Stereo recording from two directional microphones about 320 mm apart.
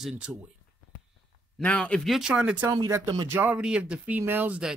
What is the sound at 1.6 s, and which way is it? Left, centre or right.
Speech, centre.